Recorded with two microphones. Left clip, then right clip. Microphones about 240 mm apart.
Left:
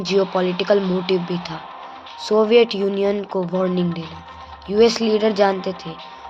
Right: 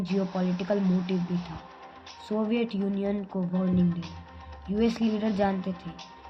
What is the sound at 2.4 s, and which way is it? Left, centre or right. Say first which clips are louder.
Speech: left 16 dB; centre.